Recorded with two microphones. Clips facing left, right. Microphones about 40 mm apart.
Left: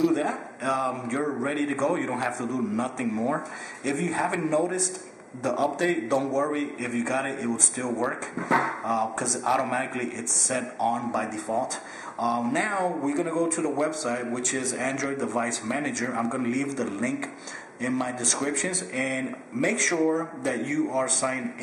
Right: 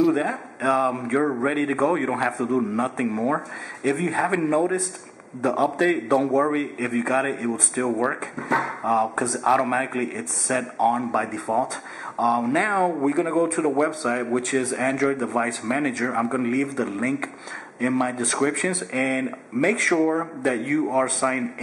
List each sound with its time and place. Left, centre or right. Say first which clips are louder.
0.1 s a man's voice: right 2 dB; centre
8.8 s a man's voice: right 5 dB; centre